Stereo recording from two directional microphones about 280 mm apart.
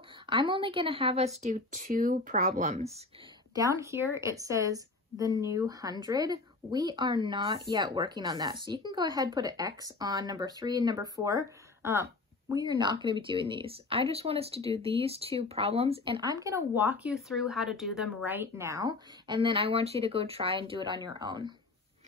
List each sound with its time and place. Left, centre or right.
0.3 s speech: centre
3.5 s a woman's voice: centre